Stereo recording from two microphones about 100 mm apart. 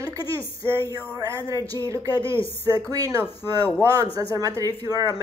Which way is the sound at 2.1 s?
60° left (ahead or behind).